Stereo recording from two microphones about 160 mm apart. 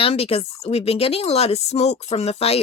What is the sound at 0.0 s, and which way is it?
Speech, 35° left (ahead or behind).